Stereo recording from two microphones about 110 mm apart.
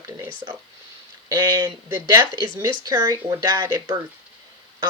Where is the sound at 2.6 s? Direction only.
30° right (ahead or behind).